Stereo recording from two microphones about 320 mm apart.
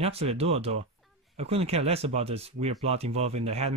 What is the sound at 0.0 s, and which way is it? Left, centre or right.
Speech, centre.